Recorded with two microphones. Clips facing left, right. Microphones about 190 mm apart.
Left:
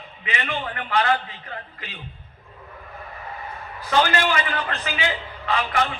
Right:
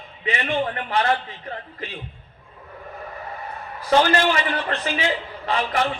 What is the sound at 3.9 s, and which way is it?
A man's voice, 35° right (ahead or behind).